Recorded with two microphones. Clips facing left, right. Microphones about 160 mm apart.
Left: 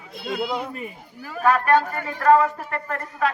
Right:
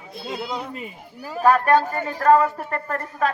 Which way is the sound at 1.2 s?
35° right (ahead or behind).